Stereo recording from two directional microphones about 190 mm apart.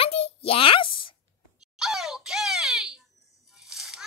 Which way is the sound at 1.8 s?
Centre (ahead or behind).